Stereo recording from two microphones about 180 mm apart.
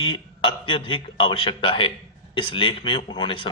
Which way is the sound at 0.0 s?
30° left (ahead or behind).